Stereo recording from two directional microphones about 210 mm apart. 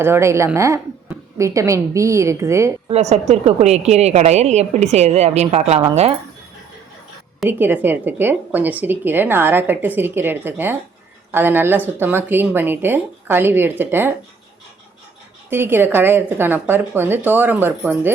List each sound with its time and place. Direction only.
0.0 s a woman's voice: 10° right (ahead or behind)
2.9 s a woman's voice: 30° right (ahead or behind)
7.4 s a woman's voice: 10° right (ahead or behind)
15.4 s a woman's voice: 10° right (ahead or behind)